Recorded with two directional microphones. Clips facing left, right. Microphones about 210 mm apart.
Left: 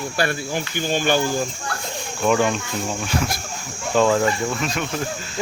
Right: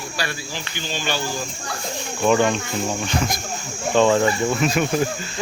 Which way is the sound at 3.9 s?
Centre (ahead or behind).